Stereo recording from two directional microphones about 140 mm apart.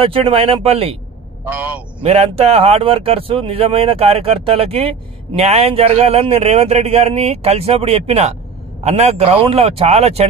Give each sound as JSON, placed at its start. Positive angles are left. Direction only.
{"t": 0.0, "sound": "a man's voice", "side_deg": -40}
{"t": 1.5, "sound": "a man's voice", "side_deg": -10}
{"t": 2.0, "sound": "a man's voice", "side_deg": -45}